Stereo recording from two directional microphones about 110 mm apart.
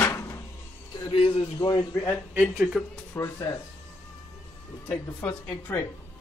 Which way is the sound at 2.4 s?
5° right (ahead or behind).